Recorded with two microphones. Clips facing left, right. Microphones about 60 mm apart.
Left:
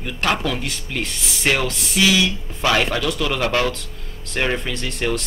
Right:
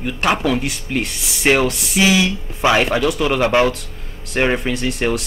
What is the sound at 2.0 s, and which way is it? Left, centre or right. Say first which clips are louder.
Speech: right 2 dB; right.